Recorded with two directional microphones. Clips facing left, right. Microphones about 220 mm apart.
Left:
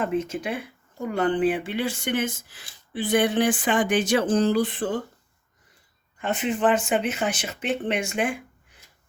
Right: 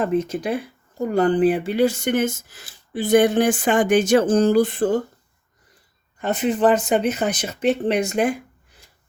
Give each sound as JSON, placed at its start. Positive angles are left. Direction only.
{"t": 0.0, "sound": "speech", "side_deg": -35}
{"t": 6.1, "sound": "speech", "side_deg": -40}